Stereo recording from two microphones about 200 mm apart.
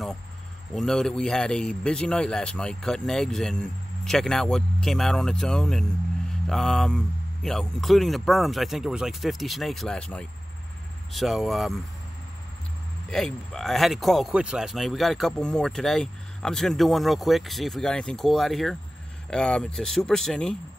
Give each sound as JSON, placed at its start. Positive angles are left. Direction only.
{"t": 0.7, "sound": "speech", "side_deg": 0}
{"t": 13.1, "sound": "speech", "side_deg": 0}